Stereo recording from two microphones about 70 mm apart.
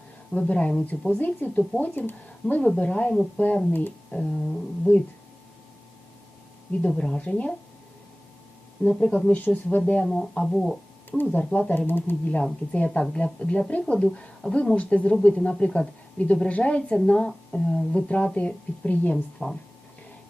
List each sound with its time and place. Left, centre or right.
0.3 s a woman's voice: centre
2.6 s a woman's voice: centre
4.1 s a woman's voice: centre
6.9 s a woman's voice: centre
8.8 s a woman's voice: centre
10.1 s speech: centre
11.2 s speech: centre
12.7 s a woman's voice: centre
19.1 s a woman's voice: centre